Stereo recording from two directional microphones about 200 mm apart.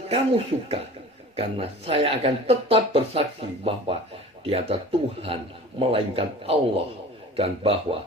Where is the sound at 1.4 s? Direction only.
30° right (ahead or behind).